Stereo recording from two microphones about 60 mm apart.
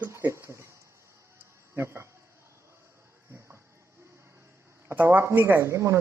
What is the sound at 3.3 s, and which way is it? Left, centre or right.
Music, right.